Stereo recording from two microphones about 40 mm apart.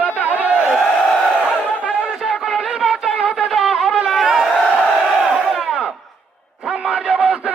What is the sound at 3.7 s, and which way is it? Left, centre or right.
Wind instrument, centre.